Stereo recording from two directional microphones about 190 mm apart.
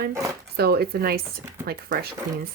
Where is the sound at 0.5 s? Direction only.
55° right (ahead or behind).